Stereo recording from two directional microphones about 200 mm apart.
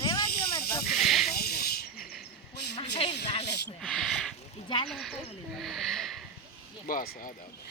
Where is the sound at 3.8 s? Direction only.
5° left (ahead or behind).